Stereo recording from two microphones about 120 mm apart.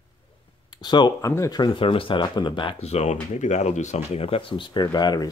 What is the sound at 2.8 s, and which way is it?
Speech, 65° left (ahead or behind).